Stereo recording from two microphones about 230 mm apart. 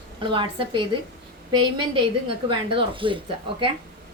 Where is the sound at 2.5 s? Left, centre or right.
Right.